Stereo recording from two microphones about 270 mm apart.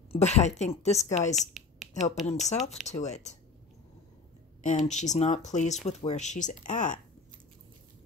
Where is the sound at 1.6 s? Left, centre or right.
Centre.